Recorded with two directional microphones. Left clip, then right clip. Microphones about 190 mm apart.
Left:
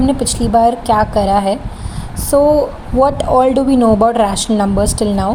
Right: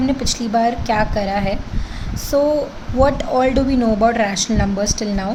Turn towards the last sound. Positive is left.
turn(degrees=20)  # may be behind; listen again after turning